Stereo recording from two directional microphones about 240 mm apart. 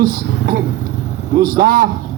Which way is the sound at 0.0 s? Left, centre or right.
Right.